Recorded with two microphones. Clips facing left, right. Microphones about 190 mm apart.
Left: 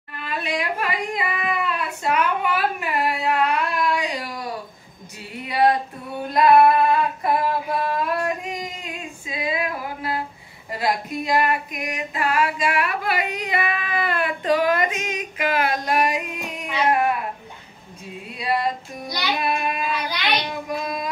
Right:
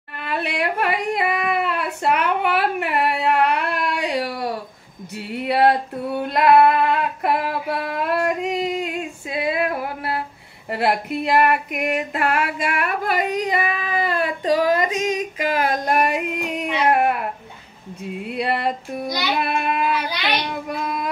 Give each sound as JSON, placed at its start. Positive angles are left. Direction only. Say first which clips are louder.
{"t": 0.2, "sound": "a sound", "louder": "right 3 dB", "side_deg": -65}
{"t": 5.4, "sound": "female singing", "louder": "right 2 dB", "side_deg": -65}
{"t": 18.2, "sound": "child singing", "louder": "right 1 dB", "side_deg": -65}